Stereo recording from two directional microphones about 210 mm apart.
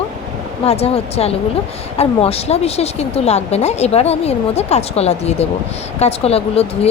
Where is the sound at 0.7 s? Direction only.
30° left (ahead or behind).